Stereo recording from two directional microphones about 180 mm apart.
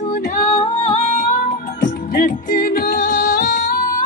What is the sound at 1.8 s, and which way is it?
Music, 45° left (ahead or behind).